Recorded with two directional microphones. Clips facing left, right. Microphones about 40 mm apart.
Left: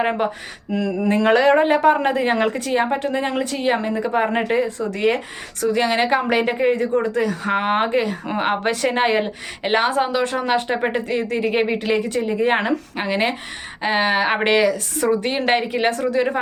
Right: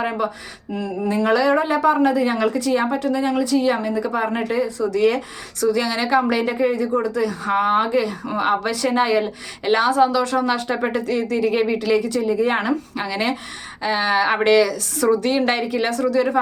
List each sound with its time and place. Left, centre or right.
0.0 s a woman's voice: left
0.7 s mantra: left
1.0 s a woman's voice: left